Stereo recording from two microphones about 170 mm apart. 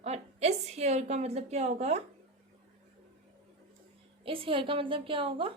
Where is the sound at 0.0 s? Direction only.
40° right (ahead or behind).